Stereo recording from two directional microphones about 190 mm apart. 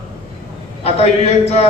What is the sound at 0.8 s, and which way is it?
Speech, 35° left (ahead or behind).